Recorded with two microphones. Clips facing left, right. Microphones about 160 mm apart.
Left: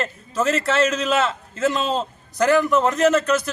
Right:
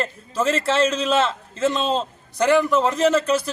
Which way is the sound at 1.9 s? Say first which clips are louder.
Right 1 dB; 5° left (ahead or behind).